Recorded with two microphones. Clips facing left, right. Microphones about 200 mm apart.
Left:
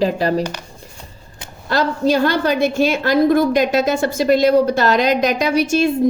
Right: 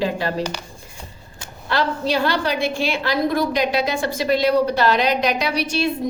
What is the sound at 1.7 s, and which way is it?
A woman's voice, 45° left (ahead or behind).